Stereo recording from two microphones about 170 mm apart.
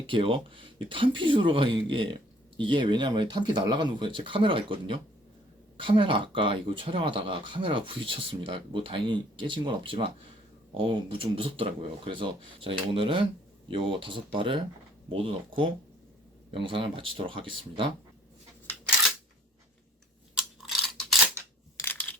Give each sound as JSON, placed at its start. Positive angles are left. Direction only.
{"t": 0.0, "sound": "speech", "side_deg": -30}
{"t": 20.3, "sound": "crunch", "side_deg": 0}